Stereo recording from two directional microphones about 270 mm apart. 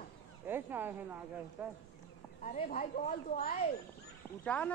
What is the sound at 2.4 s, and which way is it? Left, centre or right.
Speech, left.